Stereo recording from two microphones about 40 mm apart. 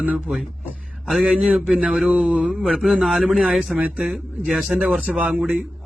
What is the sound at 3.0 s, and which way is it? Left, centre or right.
Speech, centre.